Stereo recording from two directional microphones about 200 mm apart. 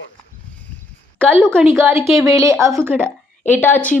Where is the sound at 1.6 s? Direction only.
10° right (ahead or behind).